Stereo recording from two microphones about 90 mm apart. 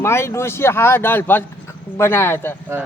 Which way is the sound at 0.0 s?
30° left (ahead or behind).